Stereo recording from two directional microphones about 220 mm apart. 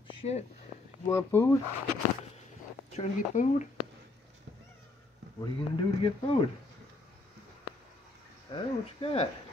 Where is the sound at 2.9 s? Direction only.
35° left (ahead or behind).